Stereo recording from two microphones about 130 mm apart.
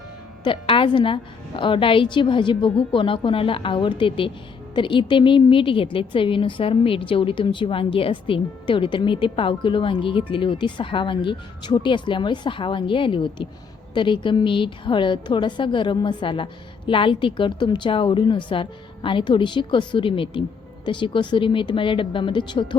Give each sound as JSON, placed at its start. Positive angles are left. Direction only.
{"t": 0.4, "sound": "a woman's voice", "side_deg": 40}